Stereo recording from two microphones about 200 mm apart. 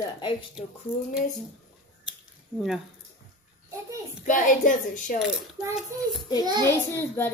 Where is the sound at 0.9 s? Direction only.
10° left (ahead or behind).